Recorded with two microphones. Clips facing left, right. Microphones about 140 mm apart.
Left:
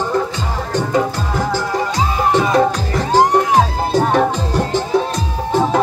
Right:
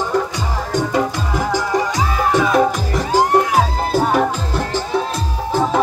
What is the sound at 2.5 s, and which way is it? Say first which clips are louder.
Music: left 1 dB; 5° right (ahead or behind).